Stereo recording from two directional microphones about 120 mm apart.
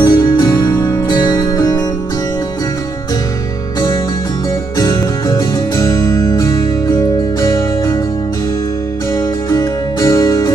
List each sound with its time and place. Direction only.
0.0 s music: 35° left (ahead or behind)
4.7 s music: 30° left (ahead or behind)
9.5 s music: 25° left (ahead or behind)